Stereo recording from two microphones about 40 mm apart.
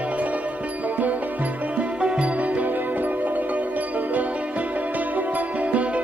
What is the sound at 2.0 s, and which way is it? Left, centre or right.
Music, right.